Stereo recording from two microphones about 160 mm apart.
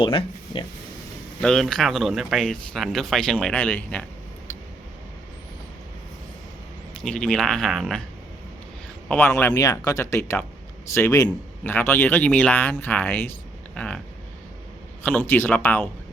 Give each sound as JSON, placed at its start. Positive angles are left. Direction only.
{"t": 0.0, "sound": "speech", "side_deg": 35}
{"t": 1.4, "sound": "speech", "side_deg": 5}
{"t": 7.0, "sound": "speech", "side_deg": 5}
{"t": 9.0, "sound": "speech", "side_deg": 15}
{"t": 15.0, "sound": "speech", "side_deg": 10}